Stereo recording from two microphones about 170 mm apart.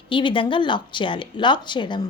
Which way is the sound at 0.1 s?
30° left (ahead or behind).